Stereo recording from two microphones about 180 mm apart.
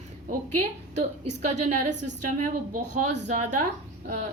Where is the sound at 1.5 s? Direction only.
40° right (ahead or behind).